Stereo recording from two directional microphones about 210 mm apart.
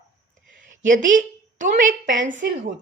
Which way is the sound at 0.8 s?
40° right (ahead or behind).